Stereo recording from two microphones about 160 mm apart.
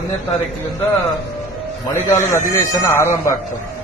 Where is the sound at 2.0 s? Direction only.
15° left (ahead or behind).